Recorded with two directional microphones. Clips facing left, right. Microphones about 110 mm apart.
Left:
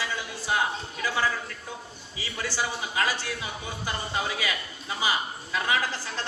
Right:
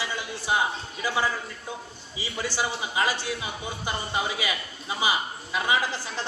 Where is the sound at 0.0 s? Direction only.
20° right (ahead or behind).